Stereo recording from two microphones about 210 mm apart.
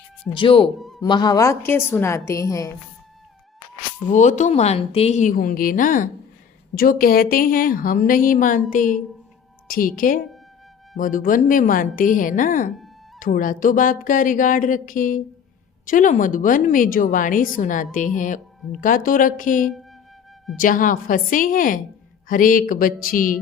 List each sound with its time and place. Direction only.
0.3 s speech: 25° left (ahead or behind)
0.8 s music: centre (ahead or behind)
1.0 s a woman's voice: 20° left (ahead or behind)
4.1 s speech: 35° left (ahead or behind)